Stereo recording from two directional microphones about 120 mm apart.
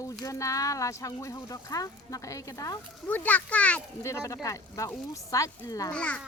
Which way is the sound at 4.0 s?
25° left (ahead or behind).